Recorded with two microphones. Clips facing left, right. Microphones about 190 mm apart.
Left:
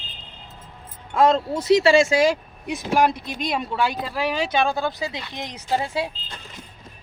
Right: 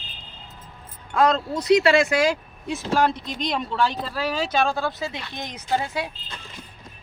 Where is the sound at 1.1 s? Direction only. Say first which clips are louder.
Left 2 dB; 25° left (ahead or behind).